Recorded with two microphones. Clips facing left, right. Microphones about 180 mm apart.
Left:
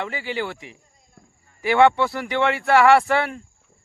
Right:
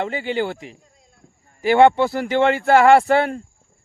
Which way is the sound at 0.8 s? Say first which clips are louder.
Right 5 dB; 90° right.